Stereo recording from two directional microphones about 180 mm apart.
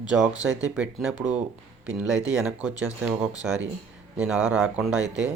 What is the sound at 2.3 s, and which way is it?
Speech, 5° right (ahead or behind).